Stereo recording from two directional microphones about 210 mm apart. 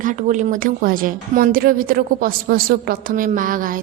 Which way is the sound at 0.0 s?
35° right (ahead or behind).